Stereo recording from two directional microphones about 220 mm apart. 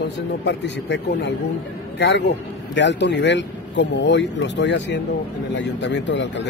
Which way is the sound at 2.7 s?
55° left (ahead or behind).